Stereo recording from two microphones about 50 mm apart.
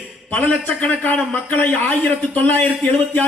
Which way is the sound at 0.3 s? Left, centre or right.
Left.